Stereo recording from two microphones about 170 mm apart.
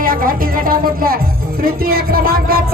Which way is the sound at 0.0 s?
60° right (ahead or behind).